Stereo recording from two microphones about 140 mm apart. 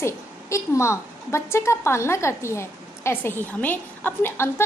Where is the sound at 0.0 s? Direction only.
20° left (ahead or behind).